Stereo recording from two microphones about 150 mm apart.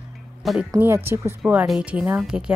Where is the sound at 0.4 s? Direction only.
Centre (ahead or behind).